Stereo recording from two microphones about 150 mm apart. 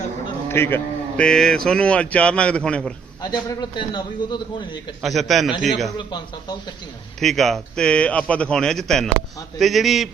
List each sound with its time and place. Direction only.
0.4 s a man's voice: 15° left (ahead or behind)
3.2 s a man's voice: 25° left (ahead or behind)
5.0 s speech: centre (ahead or behind)
6.0 s a man's voice: 30° left (ahead or behind)
7.2 s speech: centre (ahead or behind)